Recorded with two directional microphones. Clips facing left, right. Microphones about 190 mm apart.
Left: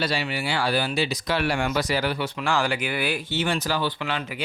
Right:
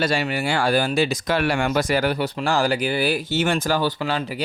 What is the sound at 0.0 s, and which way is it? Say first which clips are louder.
Speech: right 4 dB; 50° right (ahead or behind).